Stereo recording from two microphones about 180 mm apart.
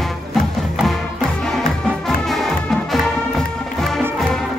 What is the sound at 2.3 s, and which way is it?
Music, centre (ahead or behind).